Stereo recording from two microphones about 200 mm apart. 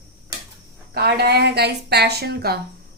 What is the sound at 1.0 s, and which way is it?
A woman's voice, 55° right (ahead or behind).